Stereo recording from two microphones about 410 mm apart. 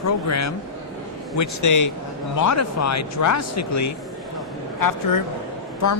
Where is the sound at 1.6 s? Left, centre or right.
Left.